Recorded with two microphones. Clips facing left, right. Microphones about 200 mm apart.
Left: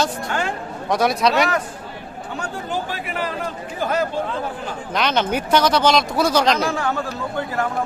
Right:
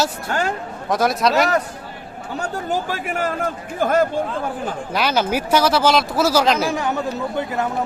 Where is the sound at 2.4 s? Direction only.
45° right (ahead or behind).